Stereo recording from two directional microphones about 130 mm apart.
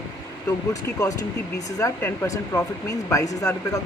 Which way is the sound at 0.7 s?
25° left (ahead or behind).